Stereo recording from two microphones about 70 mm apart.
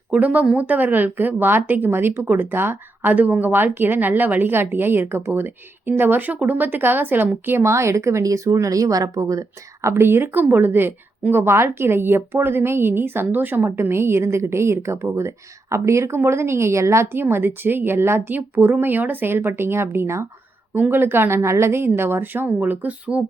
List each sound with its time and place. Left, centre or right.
0.1 s speech: right
7.6 s speech: right
9.9 s a woman's voice: right
20.7 s a woman's voice: right